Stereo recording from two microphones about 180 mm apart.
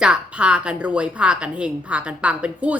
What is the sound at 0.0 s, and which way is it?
A woman's voice, 5° right (ahead or behind).